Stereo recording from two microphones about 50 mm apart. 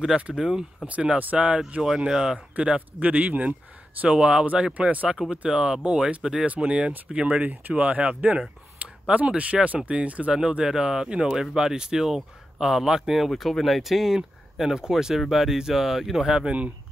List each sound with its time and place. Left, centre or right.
0.3 s speech: centre
0.8 s speech: right
2.0 s speech: centre
4.2 s speech: centre
4.7 s speech: right
8.8 s a sound: right
9.1 s speech: right
10.3 s speech: centre
13.3 s speech: centre